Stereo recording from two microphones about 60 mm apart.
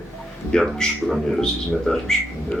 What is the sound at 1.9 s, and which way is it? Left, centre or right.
Speech, centre.